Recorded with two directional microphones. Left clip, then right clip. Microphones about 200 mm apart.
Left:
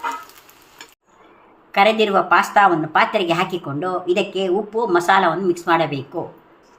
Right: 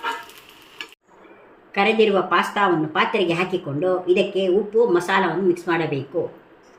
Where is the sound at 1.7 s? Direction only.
45° left (ahead or behind).